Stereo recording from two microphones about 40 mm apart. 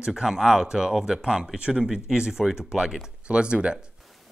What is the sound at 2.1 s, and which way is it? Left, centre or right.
Speech, right.